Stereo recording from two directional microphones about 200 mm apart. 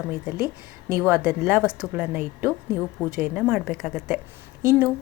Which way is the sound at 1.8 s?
10° right (ahead or behind).